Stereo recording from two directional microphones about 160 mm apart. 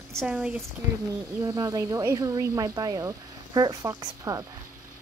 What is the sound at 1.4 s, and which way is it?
Speech, 20° right (ahead or behind).